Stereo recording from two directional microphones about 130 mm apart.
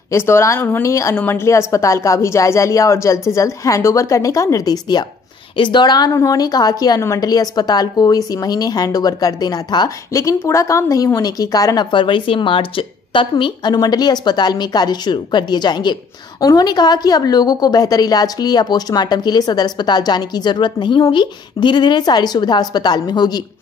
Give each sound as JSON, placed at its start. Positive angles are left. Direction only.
{"t": 0.1, "sound": "a woman's voice", "side_deg": 20}